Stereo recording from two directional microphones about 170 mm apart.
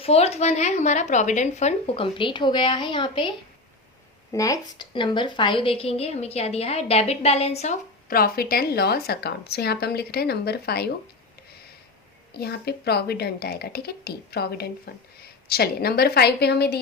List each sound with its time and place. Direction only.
0.0 s speech: 35° left (ahead or behind)
4.3 s a woman's voice: 20° left (ahead or behind); by 8.1 s 45° left (ahead or behind)
8.1 s a woman's voice: 60° left (ahead or behind)
12.3 s a woman's voice: 70° left (ahead or behind)